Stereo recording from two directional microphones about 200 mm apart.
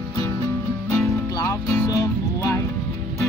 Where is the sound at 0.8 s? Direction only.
15° left (ahead or behind).